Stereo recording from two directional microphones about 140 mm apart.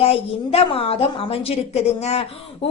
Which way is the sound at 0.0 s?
45° left (ahead or behind).